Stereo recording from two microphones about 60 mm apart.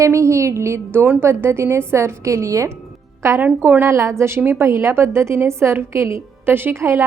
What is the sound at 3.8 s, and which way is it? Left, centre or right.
A woman's voice, right.